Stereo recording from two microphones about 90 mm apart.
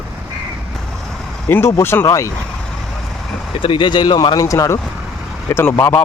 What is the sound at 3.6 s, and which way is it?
Speech, 65° left (ahead or behind).